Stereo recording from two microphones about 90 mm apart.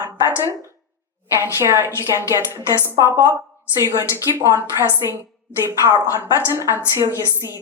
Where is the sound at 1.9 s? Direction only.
35° left (ahead or behind).